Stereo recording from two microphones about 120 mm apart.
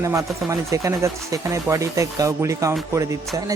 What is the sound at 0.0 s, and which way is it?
Speech, 25° right (ahead or behind).